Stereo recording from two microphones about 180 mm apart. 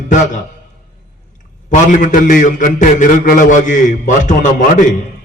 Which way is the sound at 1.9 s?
45° left (ahead or behind).